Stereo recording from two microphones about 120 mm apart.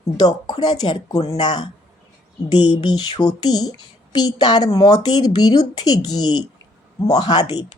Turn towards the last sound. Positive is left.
turn(degrees=35)  # may be behind; listen again after turning